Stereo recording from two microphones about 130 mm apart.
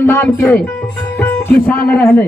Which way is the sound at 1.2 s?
15° left (ahead or behind).